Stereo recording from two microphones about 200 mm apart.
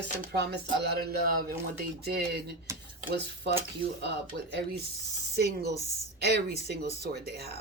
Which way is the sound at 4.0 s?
60° right (ahead or behind).